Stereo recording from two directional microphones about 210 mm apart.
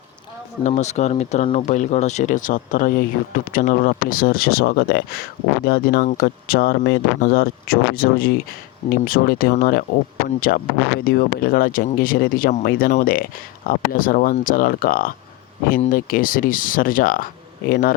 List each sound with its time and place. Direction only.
0.8 s speech: 30° left (ahead or behind)